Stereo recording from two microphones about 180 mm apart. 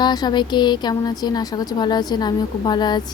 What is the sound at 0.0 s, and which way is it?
Speech, 25° left (ahead or behind).